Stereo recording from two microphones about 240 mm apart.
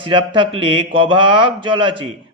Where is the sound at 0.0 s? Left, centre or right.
Centre.